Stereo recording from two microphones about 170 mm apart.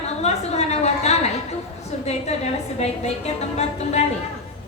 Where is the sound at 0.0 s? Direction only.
40° left (ahead or behind).